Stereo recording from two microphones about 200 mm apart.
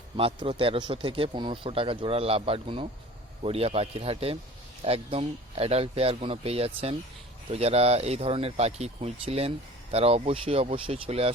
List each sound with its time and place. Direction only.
0.2 s speech: 25° right (ahead or behind)